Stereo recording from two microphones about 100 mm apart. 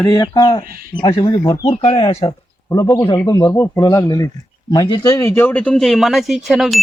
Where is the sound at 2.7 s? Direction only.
30° left (ahead or behind); by 6.8 s centre (ahead or behind).